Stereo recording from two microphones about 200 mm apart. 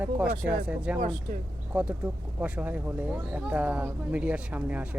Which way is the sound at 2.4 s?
5° right (ahead or behind).